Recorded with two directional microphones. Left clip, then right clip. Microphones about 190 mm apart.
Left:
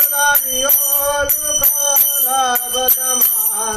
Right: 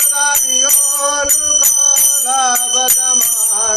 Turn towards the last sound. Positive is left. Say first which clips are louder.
# right 5 dB
turn(degrees=-50)  # may be behind; listen again after turning